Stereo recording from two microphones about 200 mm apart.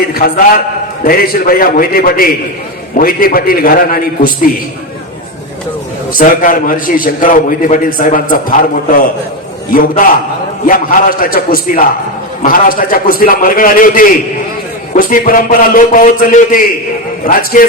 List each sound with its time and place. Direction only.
0.1 s a man's voice: 45° left (ahead or behind)
6.1 s a man's voice: 40° left (ahead or behind)